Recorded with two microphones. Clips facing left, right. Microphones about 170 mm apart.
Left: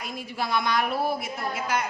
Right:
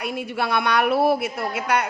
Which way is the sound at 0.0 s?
65° right (ahead or behind).